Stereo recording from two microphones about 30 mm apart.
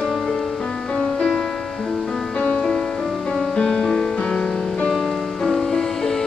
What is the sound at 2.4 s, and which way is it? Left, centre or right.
Music, left.